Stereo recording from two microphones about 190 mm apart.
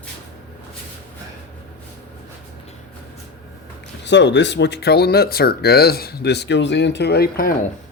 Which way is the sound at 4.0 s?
65° left (ahead or behind).